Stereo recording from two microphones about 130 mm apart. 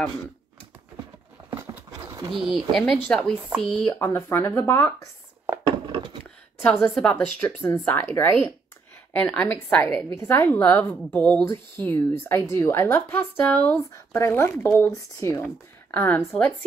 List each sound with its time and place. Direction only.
1.5 s a sound: 20° right (ahead or behind)
2.5 s speech: centre (ahead or behind)
3.3 s speech: 10° right (ahead or behind)
3.7 s a woman's voice: 15° left (ahead or behind)
6.6 s a woman's voice: 10° left (ahead or behind)